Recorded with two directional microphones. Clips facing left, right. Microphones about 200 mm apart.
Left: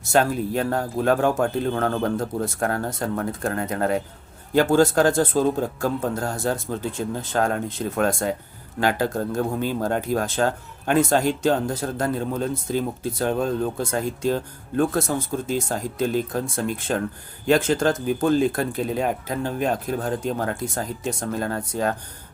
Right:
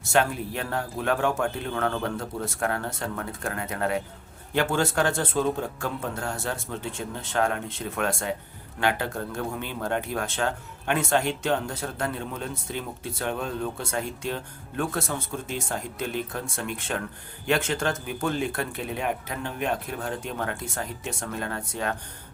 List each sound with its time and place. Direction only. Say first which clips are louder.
0.1 s a man's voice: left 4 dB; 40° left (ahead or behind)